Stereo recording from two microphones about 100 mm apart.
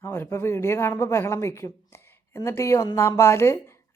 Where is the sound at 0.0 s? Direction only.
25° left (ahead or behind).